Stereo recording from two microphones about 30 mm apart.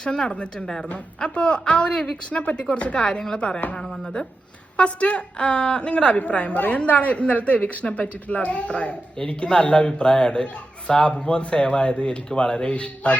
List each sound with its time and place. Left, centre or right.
0.0 s a woman's voice: left
0.6 s a man's voice: left
1.3 s a woman's voice: left
3.8 s speech: centre
4.8 s a woman's voice: left
9.1 s a man's voice: left
12.7 s speech: left